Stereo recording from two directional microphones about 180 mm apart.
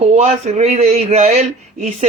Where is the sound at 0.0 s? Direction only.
40° right (ahead or behind).